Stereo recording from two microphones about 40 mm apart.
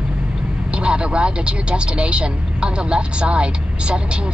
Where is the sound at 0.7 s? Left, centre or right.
Right.